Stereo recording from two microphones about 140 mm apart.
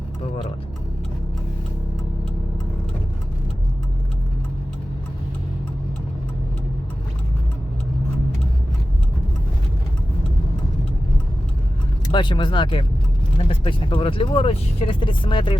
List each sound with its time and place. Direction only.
12.1 s speech: 35° left (ahead or behind)